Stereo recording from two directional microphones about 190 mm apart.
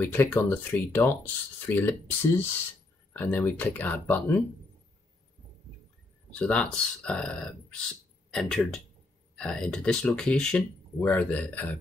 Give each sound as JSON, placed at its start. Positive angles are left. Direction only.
{"t": 0.0, "sound": "speech", "side_deg": 10}
{"t": 6.3, "sound": "speech", "side_deg": 5}